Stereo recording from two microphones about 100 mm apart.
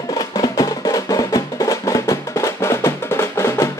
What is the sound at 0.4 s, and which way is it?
Music, 40° left (ahead or behind).